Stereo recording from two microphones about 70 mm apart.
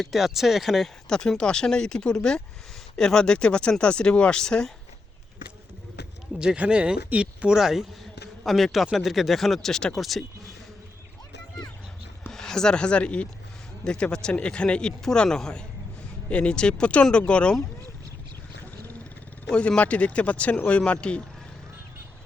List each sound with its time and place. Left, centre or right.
0.0 s speech: centre
6.4 s speech: centre
12.3 s speech: centre
19.5 s speech: centre